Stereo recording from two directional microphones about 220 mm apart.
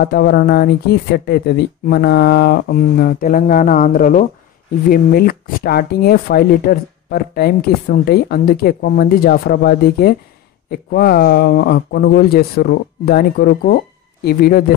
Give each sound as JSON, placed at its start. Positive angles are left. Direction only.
{"t": 0.0, "sound": "speech", "side_deg": 45}